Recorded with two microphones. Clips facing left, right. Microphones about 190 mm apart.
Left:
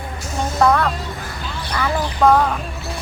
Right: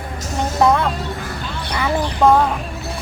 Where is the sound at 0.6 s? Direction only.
20° right (ahead or behind).